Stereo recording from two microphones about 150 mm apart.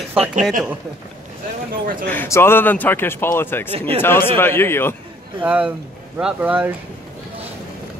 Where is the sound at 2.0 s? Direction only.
15° left (ahead or behind).